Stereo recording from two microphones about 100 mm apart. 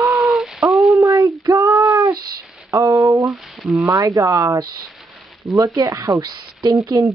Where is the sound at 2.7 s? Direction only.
30° right (ahead or behind).